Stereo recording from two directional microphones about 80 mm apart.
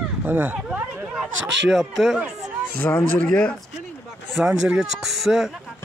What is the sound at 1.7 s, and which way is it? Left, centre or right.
Speech, centre.